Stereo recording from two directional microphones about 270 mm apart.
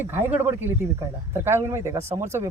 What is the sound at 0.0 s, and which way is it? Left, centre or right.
Speech, centre.